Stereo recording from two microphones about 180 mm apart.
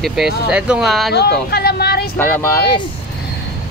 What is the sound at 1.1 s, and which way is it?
Speech, 65° left (ahead or behind).